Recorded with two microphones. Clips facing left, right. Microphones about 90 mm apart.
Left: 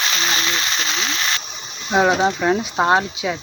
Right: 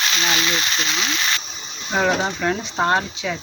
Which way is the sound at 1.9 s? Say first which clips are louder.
Left 4 dB; 10° left (ahead or behind).